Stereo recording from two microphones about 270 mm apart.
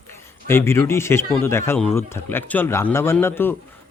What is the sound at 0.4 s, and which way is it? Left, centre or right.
Speech, centre.